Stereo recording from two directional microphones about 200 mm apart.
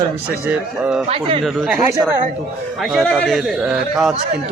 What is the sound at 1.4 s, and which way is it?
Speech, centre (ahead or behind).